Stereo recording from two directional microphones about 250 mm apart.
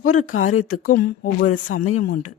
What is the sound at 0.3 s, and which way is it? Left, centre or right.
Speech, left.